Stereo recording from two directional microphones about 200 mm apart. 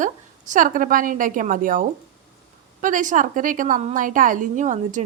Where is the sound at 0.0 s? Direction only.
40° right (ahead or behind).